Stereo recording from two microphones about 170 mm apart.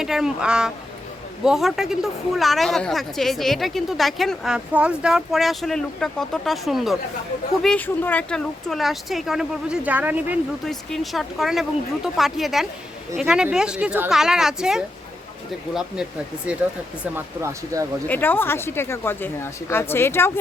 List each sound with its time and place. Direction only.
0.0 s a woman's voice: centre (ahead or behind)
10.7 s a woman's voice: centre (ahead or behind)
16.5 s speech: 10° right (ahead or behind)
18.1 s speech: 10° left (ahead or behind)